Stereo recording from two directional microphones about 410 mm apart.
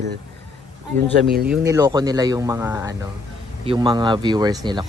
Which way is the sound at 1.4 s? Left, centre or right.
Centre.